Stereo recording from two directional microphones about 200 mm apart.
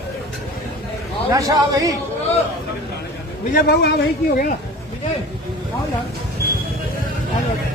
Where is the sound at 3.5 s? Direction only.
55° left (ahead or behind).